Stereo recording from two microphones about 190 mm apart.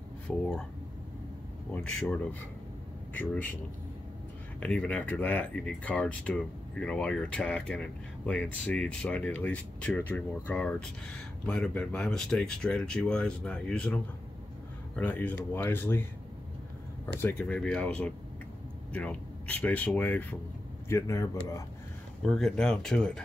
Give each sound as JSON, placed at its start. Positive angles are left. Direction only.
{"t": 0.3, "sound": "speech", "side_deg": 5}
{"t": 1.7, "sound": "speech", "side_deg": 5}
{"t": 3.2, "sound": "speech", "side_deg": 10}
{"t": 4.6, "sound": "speech", "side_deg": 5}
{"t": 17.2, "sound": "speech", "side_deg": 10}
{"t": 22.2, "sound": "speech", "side_deg": 5}